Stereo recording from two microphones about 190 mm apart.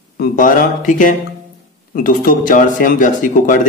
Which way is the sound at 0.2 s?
45° left (ahead or behind).